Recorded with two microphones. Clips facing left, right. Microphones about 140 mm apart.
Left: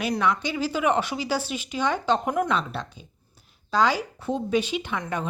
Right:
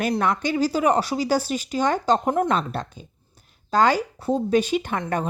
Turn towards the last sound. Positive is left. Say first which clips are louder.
# right 4 dB
turn(degrees=-45)  # may be behind; listen again after turning